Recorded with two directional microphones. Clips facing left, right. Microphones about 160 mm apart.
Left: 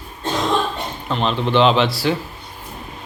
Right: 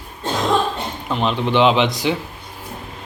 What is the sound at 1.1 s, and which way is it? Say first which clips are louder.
Speech: even; 15° right (ahead or behind).